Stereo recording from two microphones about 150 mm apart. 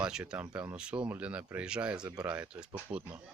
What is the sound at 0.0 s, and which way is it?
Speech, 5° right (ahead or behind).